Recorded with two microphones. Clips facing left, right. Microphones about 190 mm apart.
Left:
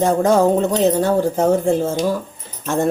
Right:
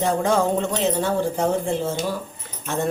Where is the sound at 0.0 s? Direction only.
45° left (ahead or behind).